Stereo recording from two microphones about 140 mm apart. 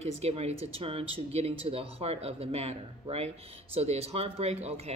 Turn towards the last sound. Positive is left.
turn(degrees=-50)  # may be behind; listen again after turning